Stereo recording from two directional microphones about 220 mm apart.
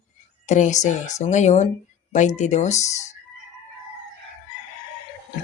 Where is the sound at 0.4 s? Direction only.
35° left (ahead or behind).